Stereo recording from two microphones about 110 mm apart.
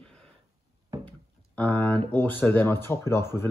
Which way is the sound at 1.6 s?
15° left (ahead or behind).